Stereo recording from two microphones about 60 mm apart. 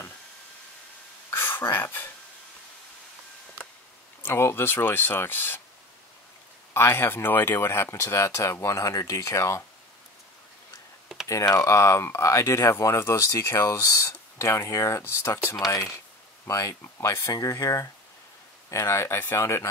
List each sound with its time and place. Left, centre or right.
1.3 s a sound: left
4.2 s speech: left
6.7 s speech: left
11.2 s speech: left
16.4 s speech: left